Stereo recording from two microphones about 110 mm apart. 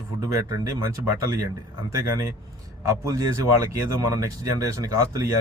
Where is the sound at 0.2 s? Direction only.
30° right (ahead or behind).